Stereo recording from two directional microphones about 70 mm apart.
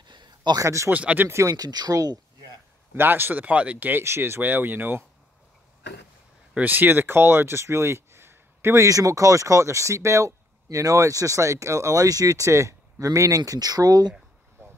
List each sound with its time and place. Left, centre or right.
0.0 s a sound: right
0.6 s speech: right
0.9 s speech: right
1.2 s speech: right
1.6 s speech: right
2.9 s speech: right
4.0 s speech: right
6.5 s speech: right
8.8 s speech: right
13.4 s speech: right